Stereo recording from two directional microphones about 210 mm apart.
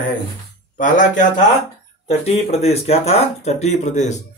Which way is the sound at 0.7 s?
40° left (ahead or behind).